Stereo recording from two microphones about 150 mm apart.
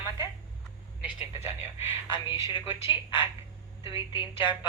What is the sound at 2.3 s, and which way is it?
Speech, 20° right (ahead or behind).